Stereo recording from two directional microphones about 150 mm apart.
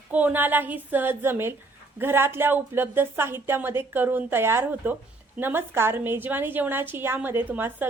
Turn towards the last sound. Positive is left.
turn(degrees=-15)  # may be behind; listen again after turning